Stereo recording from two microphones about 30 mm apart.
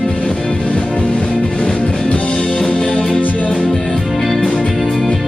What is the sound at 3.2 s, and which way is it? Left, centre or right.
Music, left.